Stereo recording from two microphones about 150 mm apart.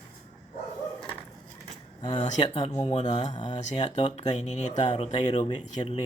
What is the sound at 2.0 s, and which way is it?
Speech, 45° left (ahead or behind).